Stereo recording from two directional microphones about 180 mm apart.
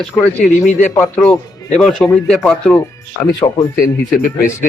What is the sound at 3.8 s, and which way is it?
Speech, 50° left (ahead or behind).